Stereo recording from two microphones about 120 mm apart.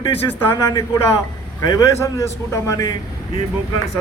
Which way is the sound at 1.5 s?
30° left (ahead or behind).